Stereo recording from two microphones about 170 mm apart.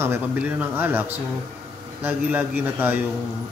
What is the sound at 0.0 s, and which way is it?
A man's voice, 10° right (ahead or behind).